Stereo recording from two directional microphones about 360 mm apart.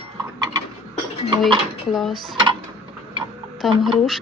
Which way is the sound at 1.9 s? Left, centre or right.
Centre.